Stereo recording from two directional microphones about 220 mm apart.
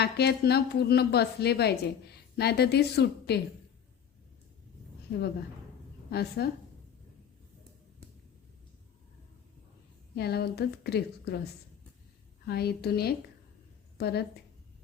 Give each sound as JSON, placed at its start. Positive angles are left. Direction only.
{"t": 0.0, "sound": "a woman's voice", "side_deg": 45}
{"t": 6.1, "sound": "a woman's voice", "side_deg": 45}
{"t": 10.2, "sound": "a woman's voice", "side_deg": 45}
{"t": 12.5, "sound": "a woman's voice", "side_deg": 45}